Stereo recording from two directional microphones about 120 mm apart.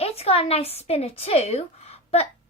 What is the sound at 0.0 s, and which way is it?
A woman's voice, 60° left (ahead or behind).